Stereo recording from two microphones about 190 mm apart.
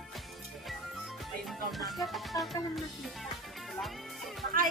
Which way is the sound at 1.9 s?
Centre (ahead or behind).